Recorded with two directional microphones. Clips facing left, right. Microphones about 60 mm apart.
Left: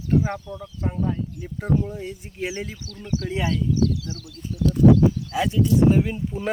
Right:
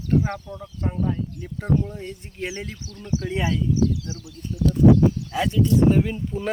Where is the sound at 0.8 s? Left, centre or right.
Centre.